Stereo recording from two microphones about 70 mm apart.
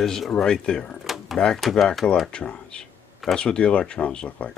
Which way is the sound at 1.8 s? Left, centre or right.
Centre.